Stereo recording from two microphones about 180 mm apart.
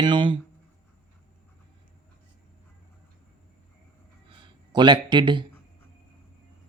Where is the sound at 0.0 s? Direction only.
25° right (ahead or behind).